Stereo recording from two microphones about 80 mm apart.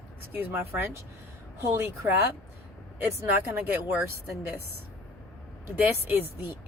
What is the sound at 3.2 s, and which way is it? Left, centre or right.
Speech, right.